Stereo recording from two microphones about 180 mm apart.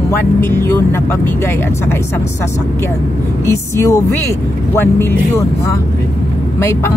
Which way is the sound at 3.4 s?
15° left (ahead or behind).